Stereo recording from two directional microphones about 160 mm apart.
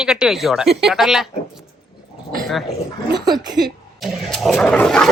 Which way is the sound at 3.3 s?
25° right (ahead or behind).